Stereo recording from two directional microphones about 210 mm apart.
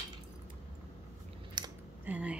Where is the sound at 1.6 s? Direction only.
20° right (ahead or behind).